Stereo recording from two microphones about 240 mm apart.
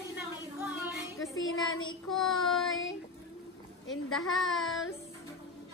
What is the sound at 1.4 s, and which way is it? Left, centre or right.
Child singing, left.